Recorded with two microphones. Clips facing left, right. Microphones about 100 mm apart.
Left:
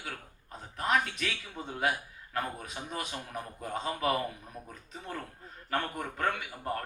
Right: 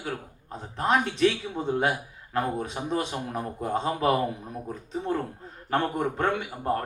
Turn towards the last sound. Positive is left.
turn(degrees=-30)  # may be behind; listen again after turning